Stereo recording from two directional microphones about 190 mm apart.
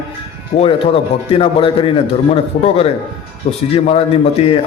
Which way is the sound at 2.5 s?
50° left (ahead or behind).